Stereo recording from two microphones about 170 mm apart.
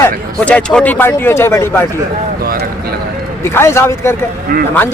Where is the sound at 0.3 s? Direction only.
5° left (ahead or behind).